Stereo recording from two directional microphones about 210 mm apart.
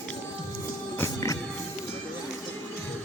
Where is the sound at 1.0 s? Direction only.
15° left (ahead or behind).